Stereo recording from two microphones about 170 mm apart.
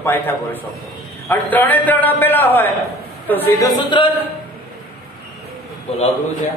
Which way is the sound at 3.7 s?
25° left (ahead or behind).